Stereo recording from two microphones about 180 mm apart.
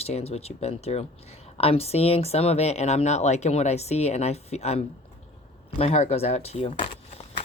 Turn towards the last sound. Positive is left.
turn(degrees=30)  # may be behind; listen again after turning